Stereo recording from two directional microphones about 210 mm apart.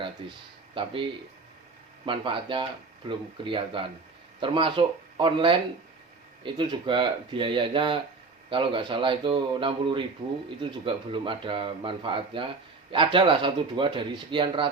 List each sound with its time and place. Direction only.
0.0 s speech: 25° right (ahead or behind)
2.0 s speech: 25° right (ahead or behind)